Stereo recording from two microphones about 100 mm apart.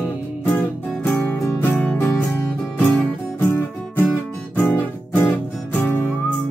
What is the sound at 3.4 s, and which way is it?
Music, 20° left (ahead or behind).